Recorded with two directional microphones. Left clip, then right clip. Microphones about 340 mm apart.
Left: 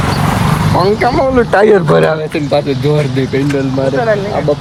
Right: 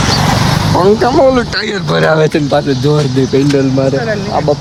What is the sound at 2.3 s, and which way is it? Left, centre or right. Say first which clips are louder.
Speech: right 1 dB; centre.